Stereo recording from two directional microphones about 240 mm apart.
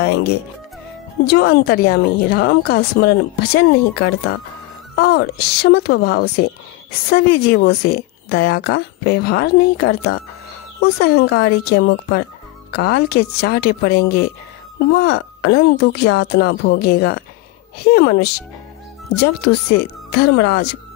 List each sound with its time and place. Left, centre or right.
0.0 s speech: left